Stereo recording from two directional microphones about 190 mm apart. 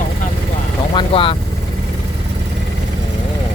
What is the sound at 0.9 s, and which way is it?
Speech, 30° left (ahead or behind).